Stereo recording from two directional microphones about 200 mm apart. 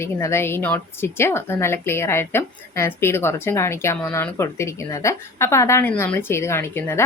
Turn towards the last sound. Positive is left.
turn(degrees=10)  # may be behind; listen again after turning